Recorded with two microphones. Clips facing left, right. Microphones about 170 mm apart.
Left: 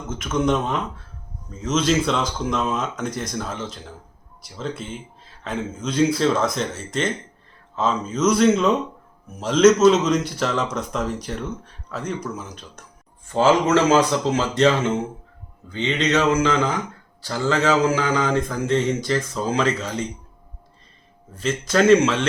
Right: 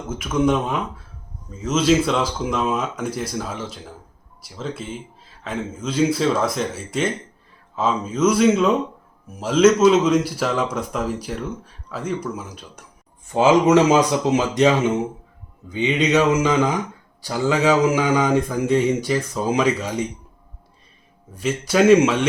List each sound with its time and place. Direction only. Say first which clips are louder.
0.1 s speech: right 2 dB; 10° right (ahead or behind)
21.3 s speech: right 1 dB; 10° right (ahead or behind)